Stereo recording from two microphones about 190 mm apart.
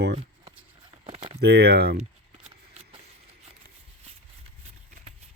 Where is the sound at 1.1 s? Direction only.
35° right (ahead or behind).